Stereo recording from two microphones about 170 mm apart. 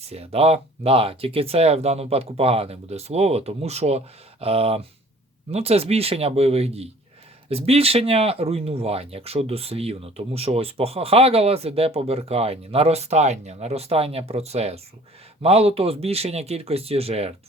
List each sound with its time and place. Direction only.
0.0 s speech: 35° right (ahead or behind)